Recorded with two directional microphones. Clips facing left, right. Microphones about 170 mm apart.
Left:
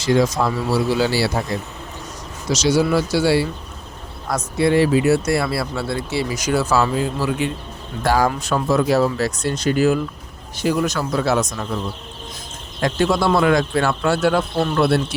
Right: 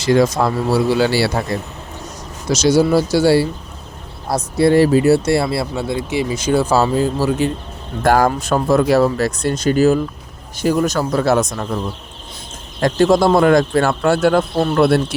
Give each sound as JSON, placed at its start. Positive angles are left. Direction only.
{"t": 0.0, "sound": "speech", "side_deg": -65}
{"t": 2.5, "sound": "speech", "side_deg": -45}
{"t": 6.3, "sound": "speech", "side_deg": -25}
{"t": 8.0, "sound": "speech", "side_deg": -50}
{"t": 12.8, "sound": "speech", "side_deg": -45}